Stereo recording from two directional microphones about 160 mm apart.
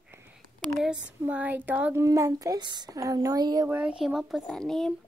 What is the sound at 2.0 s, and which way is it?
A child's voice, 20° right (ahead or behind).